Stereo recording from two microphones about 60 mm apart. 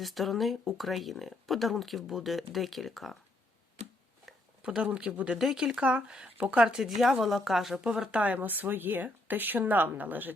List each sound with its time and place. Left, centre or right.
0.0 s speech: centre
4.3 s a sound: centre
4.8 s speech: centre
5.4 s speech: centre
6.8 s speech: centre
8.1 s speech: right